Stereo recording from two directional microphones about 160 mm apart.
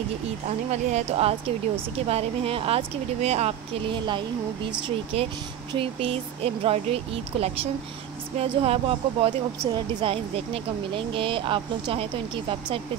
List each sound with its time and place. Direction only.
0.7 s speech: 40° right (ahead or behind)